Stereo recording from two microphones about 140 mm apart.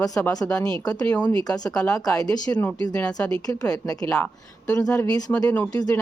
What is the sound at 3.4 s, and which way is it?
Speech, 25° left (ahead or behind).